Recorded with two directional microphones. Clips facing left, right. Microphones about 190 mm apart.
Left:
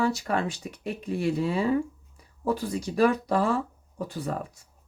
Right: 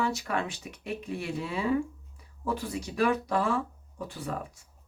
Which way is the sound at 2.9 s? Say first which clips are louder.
Left 4 dB; 30° left (ahead or behind).